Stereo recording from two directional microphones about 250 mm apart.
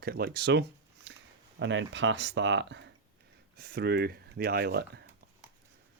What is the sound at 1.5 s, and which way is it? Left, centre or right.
Speech, right.